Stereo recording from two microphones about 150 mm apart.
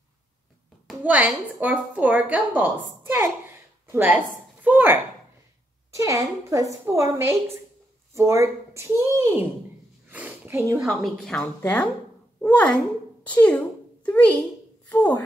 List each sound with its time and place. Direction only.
0.8 s a woman's voice: 10° right (ahead or behind)
10.0 s a sound: 10° right (ahead or behind)
10.8 s a woman's voice: centre (ahead or behind)
11.6 s a woman's voice: 10° left (ahead or behind)
13.3 s a sound: 10° left (ahead or behind)
14.9 s a woman's voice: 10° left (ahead or behind)